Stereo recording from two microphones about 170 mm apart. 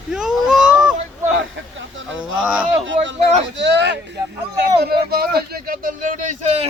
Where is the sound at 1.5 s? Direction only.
90° right.